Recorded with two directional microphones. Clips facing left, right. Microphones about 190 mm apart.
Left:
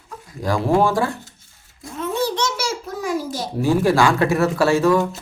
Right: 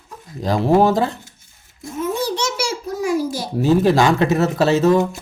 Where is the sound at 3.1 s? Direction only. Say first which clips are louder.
Right 2 dB; 10° right (ahead or behind).